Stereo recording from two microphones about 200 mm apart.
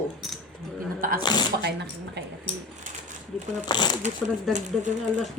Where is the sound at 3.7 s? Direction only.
20° left (ahead or behind).